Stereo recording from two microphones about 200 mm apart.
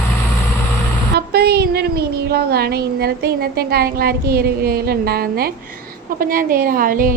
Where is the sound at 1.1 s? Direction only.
55° right (ahead or behind).